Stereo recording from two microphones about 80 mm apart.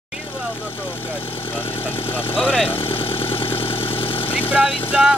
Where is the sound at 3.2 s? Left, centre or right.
Left.